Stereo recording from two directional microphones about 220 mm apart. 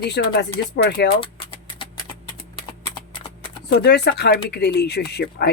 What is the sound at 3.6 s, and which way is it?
Speech, 45° left (ahead or behind).